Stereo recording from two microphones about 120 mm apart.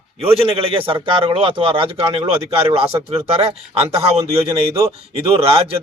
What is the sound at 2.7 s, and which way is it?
Speech, 50° right (ahead or behind).